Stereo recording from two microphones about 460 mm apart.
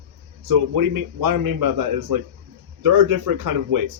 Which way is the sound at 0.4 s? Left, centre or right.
Right.